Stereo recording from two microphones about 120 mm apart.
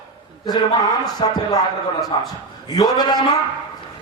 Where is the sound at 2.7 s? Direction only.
35° left (ahead or behind).